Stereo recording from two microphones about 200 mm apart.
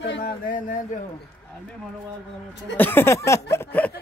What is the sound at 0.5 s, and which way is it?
Speech, 40° left (ahead or behind).